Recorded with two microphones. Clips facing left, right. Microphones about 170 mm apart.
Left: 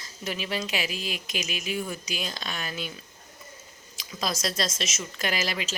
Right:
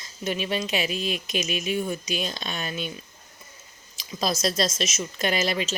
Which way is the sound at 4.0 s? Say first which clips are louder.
Right 4 dB; 25° right (ahead or behind).